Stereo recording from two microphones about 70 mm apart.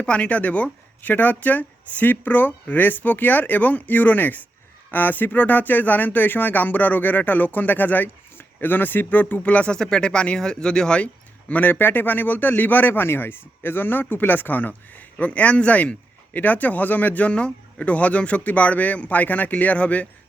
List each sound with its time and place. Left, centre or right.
0.0 s a man's voice: centre